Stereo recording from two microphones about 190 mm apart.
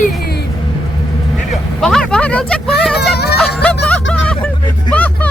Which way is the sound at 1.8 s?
5° left (ahead or behind).